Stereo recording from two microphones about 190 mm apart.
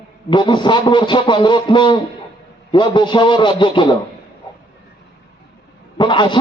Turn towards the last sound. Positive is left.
turn(degrees=25)  # may be behind; listen again after turning